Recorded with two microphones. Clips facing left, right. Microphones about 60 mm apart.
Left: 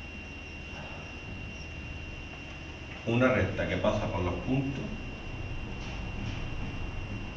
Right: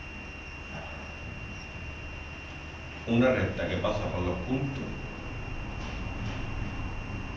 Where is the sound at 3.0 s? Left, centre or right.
Centre.